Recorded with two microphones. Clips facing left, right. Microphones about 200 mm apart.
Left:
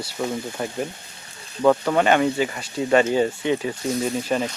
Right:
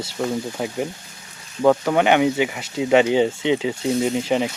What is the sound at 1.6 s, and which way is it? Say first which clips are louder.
Speech: right 1 dB; 10° right (ahead or behind).